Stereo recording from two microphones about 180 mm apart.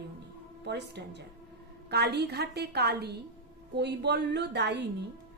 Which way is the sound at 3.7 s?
65° right (ahead or behind).